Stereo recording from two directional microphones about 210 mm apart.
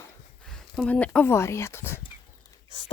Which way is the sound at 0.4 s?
5° left (ahead or behind).